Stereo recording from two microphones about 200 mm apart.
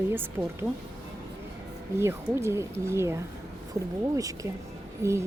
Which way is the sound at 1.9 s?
15° right (ahead or behind).